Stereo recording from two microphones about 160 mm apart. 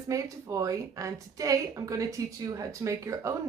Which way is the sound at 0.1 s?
20° right (ahead or behind).